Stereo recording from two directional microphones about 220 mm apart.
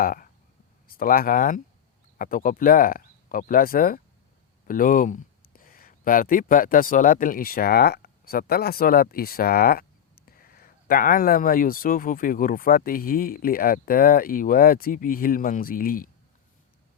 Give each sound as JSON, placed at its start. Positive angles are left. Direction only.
{"t": 0.0, "sound": "speech", "side_deg": 40}